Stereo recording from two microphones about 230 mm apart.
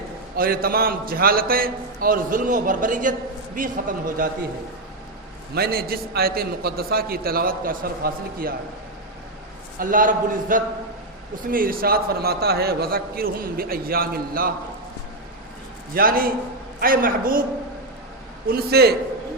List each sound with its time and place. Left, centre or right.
0.3 s a man's voice: right
5.5 s a man's voice: right
9.7 s a man's voice: right
16.0 s a man's voice: right
18.4 s a man's voice: right